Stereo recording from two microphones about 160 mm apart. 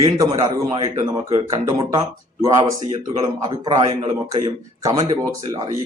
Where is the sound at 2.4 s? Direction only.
25° right (ahead or behind).